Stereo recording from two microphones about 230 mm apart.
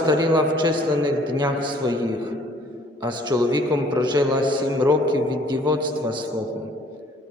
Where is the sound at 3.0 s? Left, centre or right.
Centre.